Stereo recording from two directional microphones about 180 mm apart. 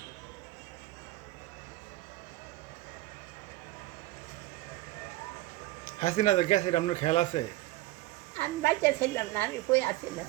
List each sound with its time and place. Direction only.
6.0 s a man's voice: 40° left (ahead or behind)
8.4 s a woman's voice: 10° left (ahead or behind)